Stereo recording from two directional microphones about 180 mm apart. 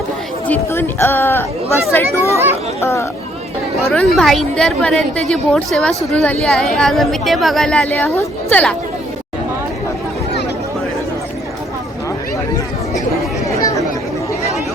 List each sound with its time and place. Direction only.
0.4 s speech: 10° left (ahead or behind)
3.8 s a woman's voice: centre (ahead or behind)
13.6 s chatter: 20° left (ahead or behind)